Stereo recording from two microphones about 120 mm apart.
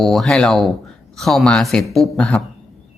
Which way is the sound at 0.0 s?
Centre (ahead or behind).